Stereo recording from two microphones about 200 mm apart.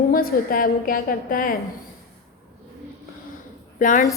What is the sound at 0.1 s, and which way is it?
A woman's voice, 45° left (ahead or behind).